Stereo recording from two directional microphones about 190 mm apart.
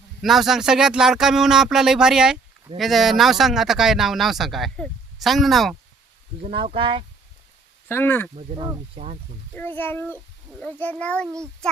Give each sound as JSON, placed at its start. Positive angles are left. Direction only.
{"t": 0.2, "sound": "speech", "side_deg": 0}
{"t": 6.4, "sound": "speech", "side_deg": -30}
{"t": 7.9, "sound": "a child's voice", "side_deg": 10}
{"t": 8.4, "sound": "speech", "side_deg": -30}
{"t": 9.6, "sound": "a child's voice", "side_deg": 10}